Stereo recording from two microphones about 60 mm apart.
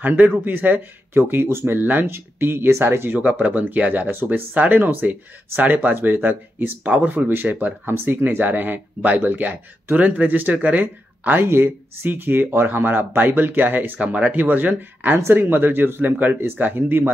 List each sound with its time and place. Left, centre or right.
0.0 s speech: right
3.1 s speech: right